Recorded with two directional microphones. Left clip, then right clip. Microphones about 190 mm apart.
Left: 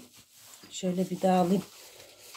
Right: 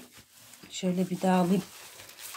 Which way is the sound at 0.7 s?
20° right (ahead or behind).